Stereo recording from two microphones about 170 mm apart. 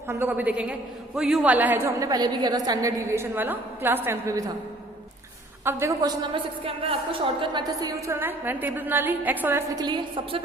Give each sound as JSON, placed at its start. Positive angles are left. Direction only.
{"t": 0.1, "sound": "a woman's voice", "side_deg": -10}
{"t": 5.6, "sound": "a woman's voice", "side_deg": -15}